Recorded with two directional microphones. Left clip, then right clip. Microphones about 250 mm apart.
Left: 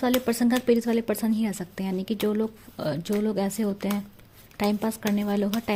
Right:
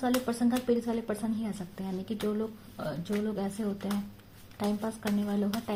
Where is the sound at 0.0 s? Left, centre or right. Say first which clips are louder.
Left 5 dB; left.